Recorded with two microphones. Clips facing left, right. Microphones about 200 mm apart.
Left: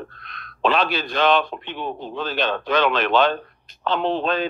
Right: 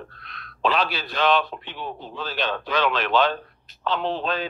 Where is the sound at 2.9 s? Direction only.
60° left (ahead or behind).